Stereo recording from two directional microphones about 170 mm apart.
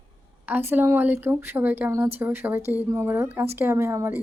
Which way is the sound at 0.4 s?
10° right (ahead or behind).